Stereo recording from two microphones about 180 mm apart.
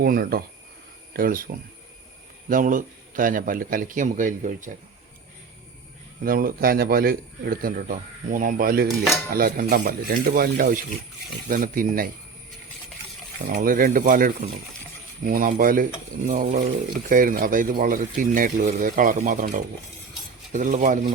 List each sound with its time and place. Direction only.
0.0 s speech: 55° right (ahead or behind)
2.5 s speech: 50° right (ahead or behind)
6.2 s speech: 50° right (ahead or behind)
13.5 s speech: 50° right (ahead or behind)